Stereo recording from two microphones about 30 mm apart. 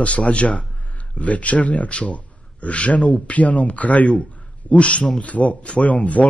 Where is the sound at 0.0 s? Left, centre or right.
Left.